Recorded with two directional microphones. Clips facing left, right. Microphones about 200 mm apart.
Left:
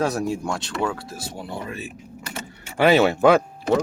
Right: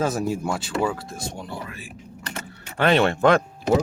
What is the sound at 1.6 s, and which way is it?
Speech, 25° left (ahead or behind).